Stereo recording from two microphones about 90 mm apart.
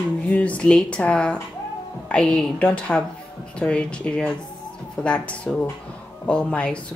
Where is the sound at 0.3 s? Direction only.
15° left (ahead or behind).